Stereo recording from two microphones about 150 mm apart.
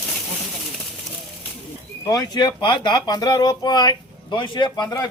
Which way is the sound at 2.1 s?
30° left (ahead or behind).